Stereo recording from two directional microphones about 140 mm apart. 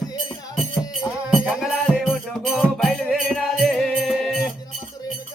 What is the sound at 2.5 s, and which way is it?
Music, centre (ahead or behind).